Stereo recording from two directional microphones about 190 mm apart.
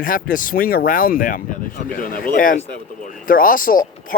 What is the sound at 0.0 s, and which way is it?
Speech, 45° left (ahead or behind).